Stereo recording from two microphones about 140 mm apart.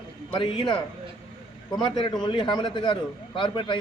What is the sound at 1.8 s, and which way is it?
A man's voice, 35° left (ahead or behind).